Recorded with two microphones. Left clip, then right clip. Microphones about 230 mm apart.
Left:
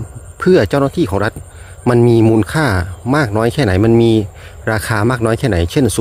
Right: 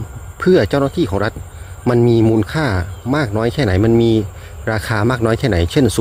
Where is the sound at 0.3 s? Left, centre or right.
Centre.